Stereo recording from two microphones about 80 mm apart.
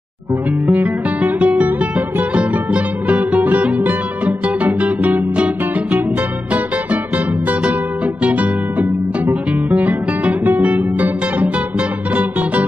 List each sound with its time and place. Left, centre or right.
0.7 s guitar: centre
2.0 s music: centre
8.2 s music: centre